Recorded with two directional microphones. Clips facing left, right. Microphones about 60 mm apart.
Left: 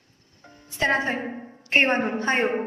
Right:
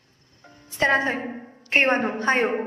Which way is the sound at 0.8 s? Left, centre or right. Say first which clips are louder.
Right 2 dB; right.